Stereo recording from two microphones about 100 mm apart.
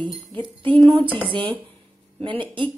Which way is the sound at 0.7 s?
60° right (ahead or behind).